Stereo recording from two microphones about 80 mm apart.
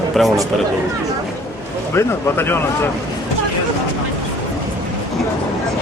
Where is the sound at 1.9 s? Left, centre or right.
Left.